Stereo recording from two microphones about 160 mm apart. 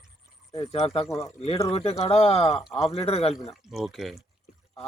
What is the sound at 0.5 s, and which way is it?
Speech, 35° left (ahead or behind).